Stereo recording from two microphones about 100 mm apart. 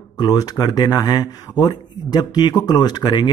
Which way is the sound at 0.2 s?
40° left (ahead or behind).